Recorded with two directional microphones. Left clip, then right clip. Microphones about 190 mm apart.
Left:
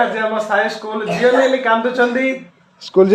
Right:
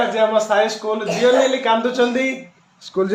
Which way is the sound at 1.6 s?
5° left (ahead or behind).